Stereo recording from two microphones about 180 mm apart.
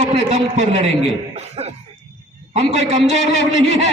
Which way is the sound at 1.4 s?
35° right (ahead or behind).